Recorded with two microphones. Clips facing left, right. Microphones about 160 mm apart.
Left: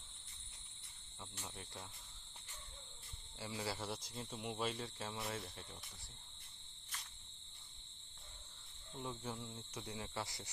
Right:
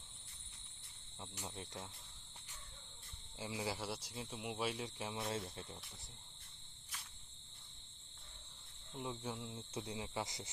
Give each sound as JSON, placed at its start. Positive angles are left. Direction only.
{"t": 1.4, "sound": "speech", "side_deg": -15}
{"t": 3.4, "sound": "speech", "side_deg": -15}
{"t": 9.0, "sound": "speech", "side_deg": -15}
{"t": 9.7, "sound": "cricket", "side_deg": -20}